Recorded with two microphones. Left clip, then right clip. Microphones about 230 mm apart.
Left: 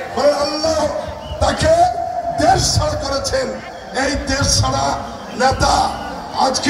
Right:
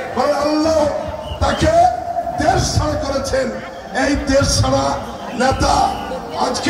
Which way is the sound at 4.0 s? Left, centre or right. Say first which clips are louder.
Right 3 dB; left.